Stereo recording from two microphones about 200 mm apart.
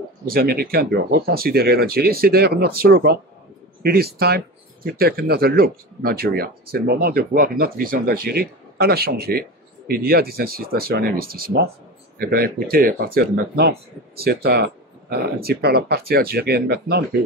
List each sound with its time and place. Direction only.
0.3 s speech: 50° right (ahead or behind)